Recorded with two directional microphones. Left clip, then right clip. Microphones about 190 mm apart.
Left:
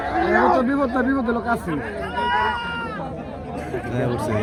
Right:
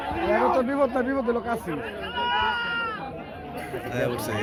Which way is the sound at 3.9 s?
Centre (ahead or behind).